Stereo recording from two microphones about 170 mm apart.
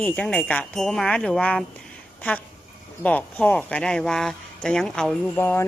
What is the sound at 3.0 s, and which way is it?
Speech, 10° left (ahead or behind).